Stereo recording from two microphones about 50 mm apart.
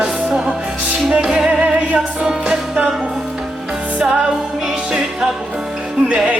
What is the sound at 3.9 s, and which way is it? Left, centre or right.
Music, centre.